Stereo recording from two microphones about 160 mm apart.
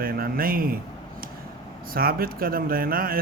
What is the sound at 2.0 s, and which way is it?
A man's voice, 65° right (ahead or behind).